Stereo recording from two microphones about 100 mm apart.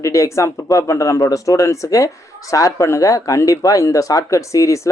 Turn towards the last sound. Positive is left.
turn(degrees=30)  # may be behind; listen again after turning